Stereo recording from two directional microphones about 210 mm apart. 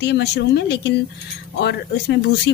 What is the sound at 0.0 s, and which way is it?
A woman's voice, 55° left (ahead or behind).